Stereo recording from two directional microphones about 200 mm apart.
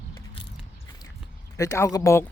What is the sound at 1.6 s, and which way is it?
Speech, 15° left (ahead or behind).